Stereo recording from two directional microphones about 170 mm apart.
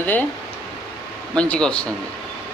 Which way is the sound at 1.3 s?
5° left (ahead or behind).